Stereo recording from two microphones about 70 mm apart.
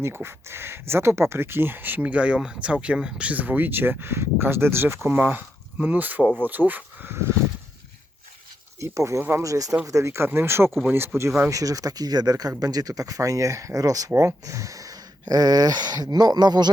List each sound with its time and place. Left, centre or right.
0.0 s speech: right
8.8 s speech: right
14.2 s speech: right